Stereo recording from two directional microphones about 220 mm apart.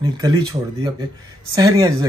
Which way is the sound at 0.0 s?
20° right (ahead or behind).